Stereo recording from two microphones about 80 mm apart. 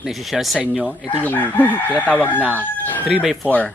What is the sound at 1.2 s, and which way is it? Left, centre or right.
Chicken, left.